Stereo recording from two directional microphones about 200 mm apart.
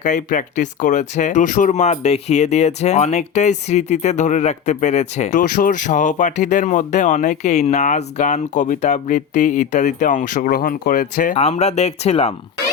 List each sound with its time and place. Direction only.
0.0 s speech: 40° left (ahead or behind)